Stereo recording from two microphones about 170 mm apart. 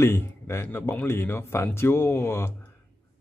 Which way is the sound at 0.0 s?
15° left (ahead or behind).